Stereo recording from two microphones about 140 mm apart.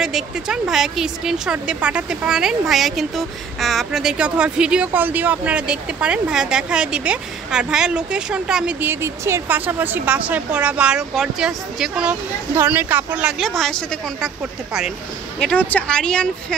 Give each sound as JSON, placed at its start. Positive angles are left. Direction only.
{"t": 0.0, "sound": "a woman's voice", "side_deg": -5}
{"t": 9.0, "sound": "a woman's voice", "side_deg": -20}
{"t": 13.4, "sound": "a woman's voice", "side_deg": 0}